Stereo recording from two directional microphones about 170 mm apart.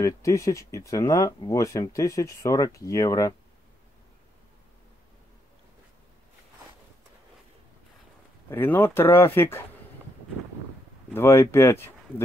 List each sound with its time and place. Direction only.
0.0 s speech: 20° left (ahead or behind)
8.5 s speech: 10° left (ahead or behind)
11.1 s speech: 15° left (ahead or behind)